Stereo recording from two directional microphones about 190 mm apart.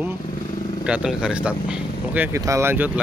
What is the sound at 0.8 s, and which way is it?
Speech, 5° right (ahead or behind).